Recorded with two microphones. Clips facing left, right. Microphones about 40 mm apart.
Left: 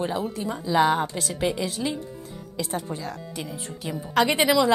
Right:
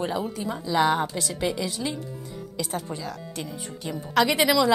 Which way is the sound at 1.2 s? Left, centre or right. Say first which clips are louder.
Left 1 dB; centre.